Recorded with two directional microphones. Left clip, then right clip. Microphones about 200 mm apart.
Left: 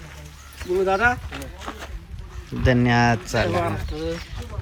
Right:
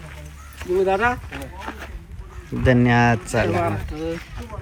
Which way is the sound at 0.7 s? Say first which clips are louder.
Even; 5° left (ahead or behind).